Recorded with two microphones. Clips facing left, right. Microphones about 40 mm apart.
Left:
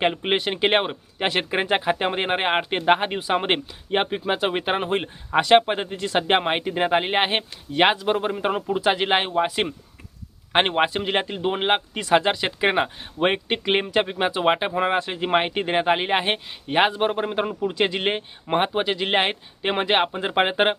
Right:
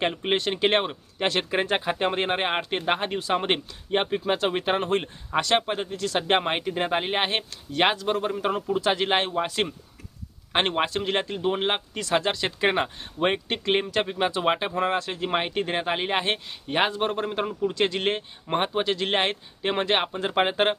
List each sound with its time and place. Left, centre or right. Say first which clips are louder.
0.0 s a man's voice: left 3 dB; left